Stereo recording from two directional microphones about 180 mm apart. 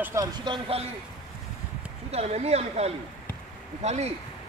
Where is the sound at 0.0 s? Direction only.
15° right (ahead or behind).